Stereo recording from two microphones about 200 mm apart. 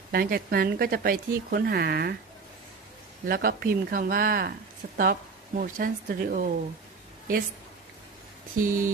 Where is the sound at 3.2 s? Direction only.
50° right (ahead or behind).